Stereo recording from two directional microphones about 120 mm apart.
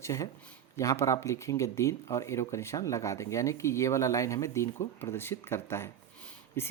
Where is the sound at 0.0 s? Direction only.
25° left (ahead or behind).